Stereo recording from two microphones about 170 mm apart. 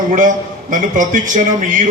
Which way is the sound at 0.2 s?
50° right (ahead or behind).